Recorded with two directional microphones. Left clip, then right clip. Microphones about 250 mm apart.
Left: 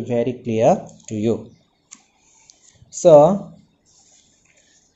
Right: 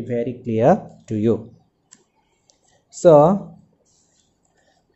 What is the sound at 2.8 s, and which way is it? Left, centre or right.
Speech, right.